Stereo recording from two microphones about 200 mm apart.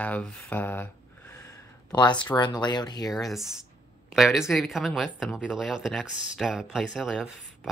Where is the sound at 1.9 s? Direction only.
20° left (ahead or behind).